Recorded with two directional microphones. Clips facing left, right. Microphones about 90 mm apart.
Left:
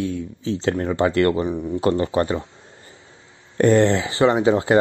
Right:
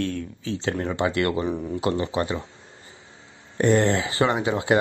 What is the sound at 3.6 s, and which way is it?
Speech, 35° left (ahead or behind).